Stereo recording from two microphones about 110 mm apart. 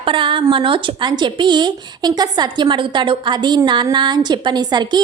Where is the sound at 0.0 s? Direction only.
50° right (ahead or behind).